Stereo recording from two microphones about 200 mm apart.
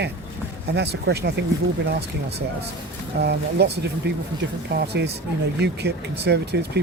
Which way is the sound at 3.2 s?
55° right (ahead or behind).